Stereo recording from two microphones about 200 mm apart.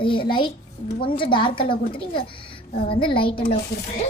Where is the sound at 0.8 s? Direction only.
50° left (ahead or behind).